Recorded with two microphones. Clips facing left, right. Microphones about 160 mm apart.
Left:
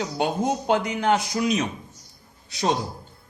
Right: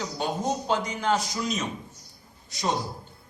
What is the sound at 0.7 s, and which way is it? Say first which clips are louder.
A man's voice: left 5 dB; 60° left (ahead or behind).